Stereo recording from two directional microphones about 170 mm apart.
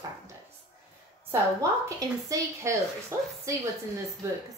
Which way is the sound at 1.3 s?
20° right (ahead or behind).